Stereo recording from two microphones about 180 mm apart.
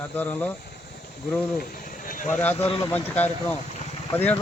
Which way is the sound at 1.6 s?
50° left (ahead or behind).